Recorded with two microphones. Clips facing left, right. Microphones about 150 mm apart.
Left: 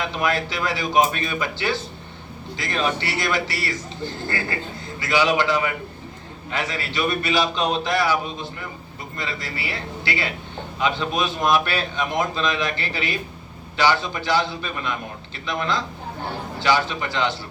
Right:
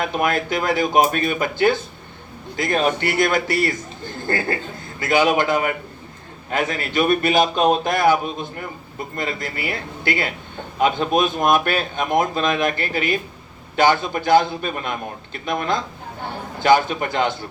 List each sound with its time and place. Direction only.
0.0 s a man's voice: 50° right (ahead or behind)